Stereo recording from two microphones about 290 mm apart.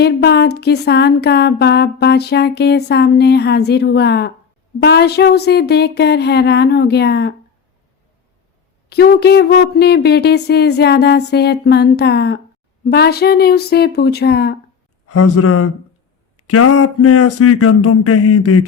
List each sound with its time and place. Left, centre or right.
0.0 s speech: left
8.9 s speech: left
15.0 s a sound: left